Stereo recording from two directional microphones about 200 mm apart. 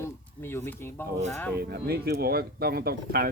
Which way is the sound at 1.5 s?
50° right (ahead or behind).